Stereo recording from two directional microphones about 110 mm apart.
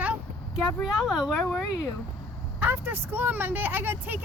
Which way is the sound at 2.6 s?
15° right (ahead or behind).